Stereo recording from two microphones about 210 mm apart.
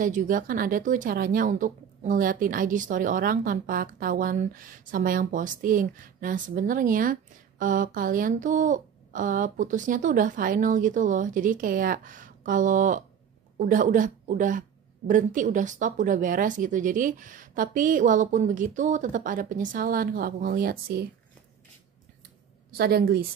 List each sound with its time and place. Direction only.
0.0 s speech: 40° right (ahead or behind)
22.8 s a woman's voice: 45° right (ahead or behind)